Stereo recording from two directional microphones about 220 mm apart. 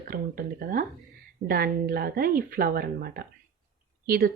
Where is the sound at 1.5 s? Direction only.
40° right (ahead or behind).